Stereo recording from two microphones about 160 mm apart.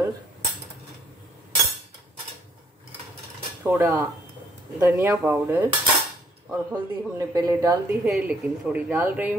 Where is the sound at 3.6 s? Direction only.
15° right (ahead or behind).